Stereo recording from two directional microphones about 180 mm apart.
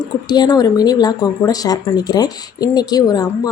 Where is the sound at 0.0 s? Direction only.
20° left (ahead or behind).